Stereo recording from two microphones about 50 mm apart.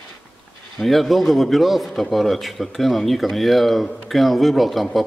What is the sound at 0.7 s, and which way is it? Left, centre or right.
A man's voice, centre.